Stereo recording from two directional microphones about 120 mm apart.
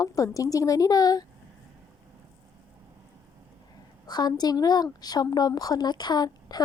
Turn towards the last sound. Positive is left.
turn(degrees=35)  # may be behind; listen again after turning